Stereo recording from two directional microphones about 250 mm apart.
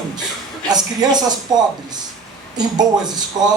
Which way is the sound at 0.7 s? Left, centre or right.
Centre.